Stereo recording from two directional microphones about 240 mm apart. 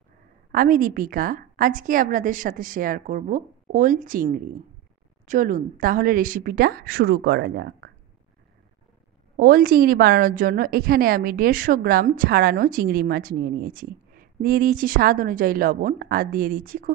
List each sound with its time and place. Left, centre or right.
0.5 s a woman's voice: right
9.4 s a woman's voice: right